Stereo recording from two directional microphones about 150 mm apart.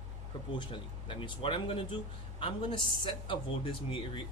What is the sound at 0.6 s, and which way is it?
Speech, 35° left (ahead or behind).